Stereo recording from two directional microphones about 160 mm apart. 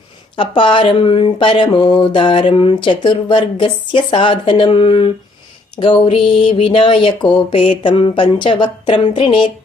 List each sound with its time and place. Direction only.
0.3 s speech: 30° left (ahead or behind)